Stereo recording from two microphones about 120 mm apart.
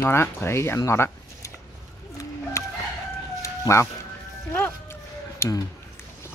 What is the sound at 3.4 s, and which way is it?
Music, 25° left (ahead or behind).